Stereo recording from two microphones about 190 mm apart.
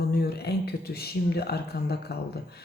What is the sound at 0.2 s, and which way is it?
Speech, 55° left (ahead or behind).